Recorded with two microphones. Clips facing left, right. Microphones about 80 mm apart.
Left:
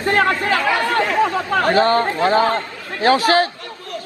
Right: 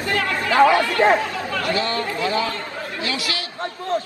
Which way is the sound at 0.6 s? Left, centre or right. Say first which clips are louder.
Right 5 dB; right.